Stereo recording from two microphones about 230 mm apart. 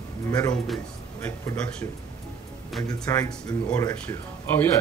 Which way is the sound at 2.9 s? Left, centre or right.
Centre.